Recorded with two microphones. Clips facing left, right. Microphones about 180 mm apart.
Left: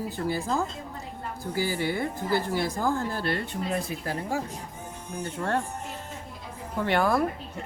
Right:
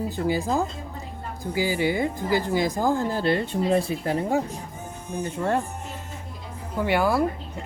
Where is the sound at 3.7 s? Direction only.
30° right (ahead or behind).